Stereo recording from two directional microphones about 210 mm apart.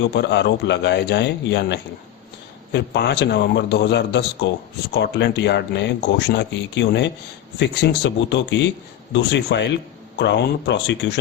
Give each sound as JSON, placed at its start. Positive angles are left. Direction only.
{"t": 0.2, "sound": "a man's voice", "side_deg": 55}